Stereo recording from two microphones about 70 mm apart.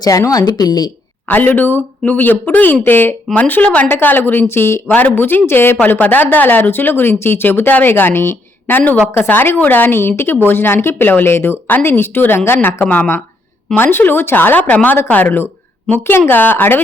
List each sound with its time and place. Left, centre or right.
0.0 s speech: left
1.3 s a woman's voice: left
4.9 s a woman's voice: left
13.7 s speech: left